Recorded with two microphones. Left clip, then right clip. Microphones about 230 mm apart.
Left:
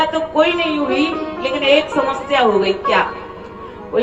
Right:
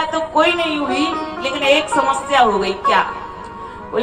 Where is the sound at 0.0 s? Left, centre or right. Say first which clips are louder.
Left 1 dB; centre.